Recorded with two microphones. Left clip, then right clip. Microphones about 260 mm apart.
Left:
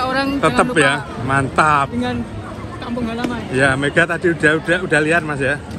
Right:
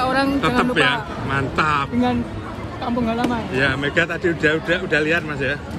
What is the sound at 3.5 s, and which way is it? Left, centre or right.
Speech, centre.